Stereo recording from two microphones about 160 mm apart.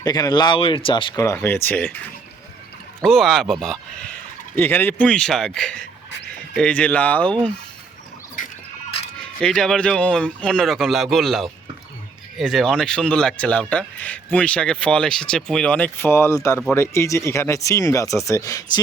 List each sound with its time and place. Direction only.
0.0 s speech: 25° left (ahead or behind)
1.2 s speech: 15° left (ahead or behind)
3.0 s speech: centre (ahead or behind)
4.5 s speech: 15° left (ahead or behind)
9.4 s speech: 5° left (ahead or behind); by 18.8 s 20° left (ahead or behind)